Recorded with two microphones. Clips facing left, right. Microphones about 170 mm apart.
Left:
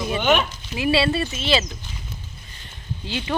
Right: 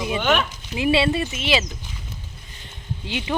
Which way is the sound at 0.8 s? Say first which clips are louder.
Right 1 dB; 20° right (ahead or behind).